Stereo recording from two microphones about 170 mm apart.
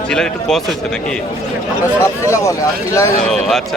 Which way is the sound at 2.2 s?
15° left (ahead or behind).